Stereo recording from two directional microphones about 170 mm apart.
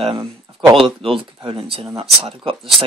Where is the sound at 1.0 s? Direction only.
30° right (ahead or behind).